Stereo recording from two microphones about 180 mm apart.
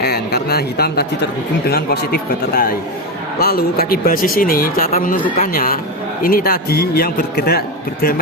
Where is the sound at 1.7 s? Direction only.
60° left (ahead or behind).